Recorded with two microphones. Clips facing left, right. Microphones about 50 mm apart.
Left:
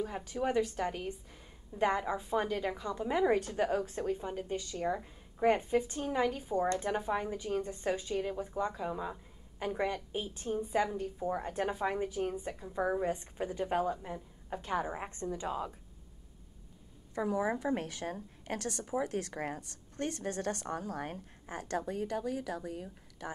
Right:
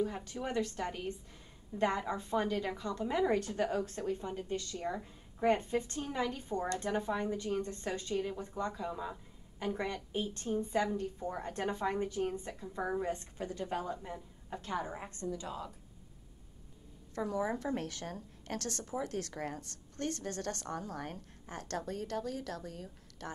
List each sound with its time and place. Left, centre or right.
0.0 s a woman's voice: centre
13.8 s a woman's voice: centre
17.1 s a woman's voice: centre